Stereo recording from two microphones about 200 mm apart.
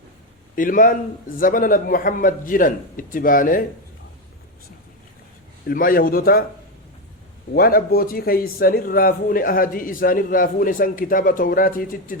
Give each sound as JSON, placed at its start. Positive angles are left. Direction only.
{"t": 0.5, "sound": "a man's voice", "side_deg": 45}
{"t": 5.6, "sound": "a man's voice", "side_deg": 45}
{"t": 7.5, "sound": "a man's voice", "side_deg": 50}